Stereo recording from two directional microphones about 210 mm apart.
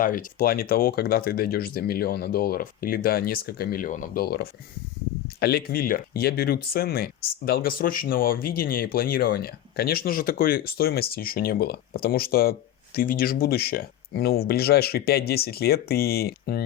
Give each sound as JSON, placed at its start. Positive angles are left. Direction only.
{"t": 0.0, "sound": "speech", "side_deg": 40}